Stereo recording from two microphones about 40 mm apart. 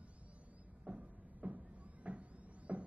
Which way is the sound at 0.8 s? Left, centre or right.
Right.